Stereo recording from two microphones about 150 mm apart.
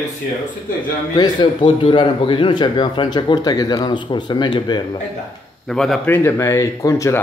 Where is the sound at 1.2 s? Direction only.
30° left (ahead or behind).